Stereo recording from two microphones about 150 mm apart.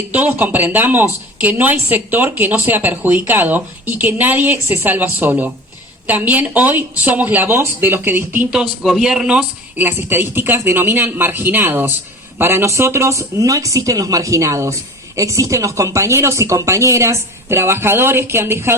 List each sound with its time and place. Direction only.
0.1 s speech: 10° right (ahead or behind)